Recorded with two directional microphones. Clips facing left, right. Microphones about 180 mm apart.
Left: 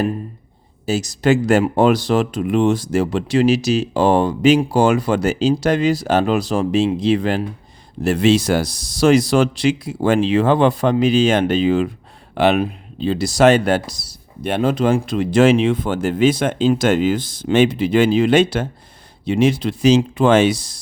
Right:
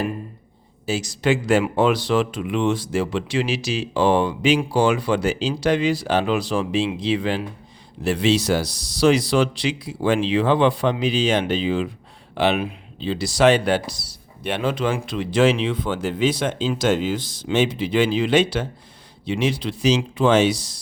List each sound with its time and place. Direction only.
0.9 s speech: 40° left (ahead or behind)